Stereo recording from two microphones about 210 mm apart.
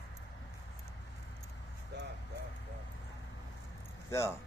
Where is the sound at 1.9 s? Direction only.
55° right (ahead or behind).